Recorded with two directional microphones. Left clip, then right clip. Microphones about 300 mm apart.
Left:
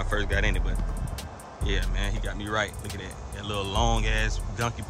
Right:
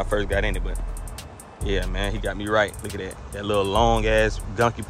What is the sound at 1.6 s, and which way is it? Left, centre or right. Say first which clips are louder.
Speech: right 6 dB; centre.